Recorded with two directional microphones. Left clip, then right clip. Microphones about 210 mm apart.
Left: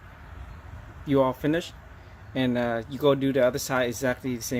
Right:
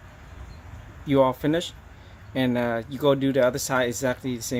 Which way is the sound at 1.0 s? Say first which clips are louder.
Right 2 dB; 5° right (ahead or behind).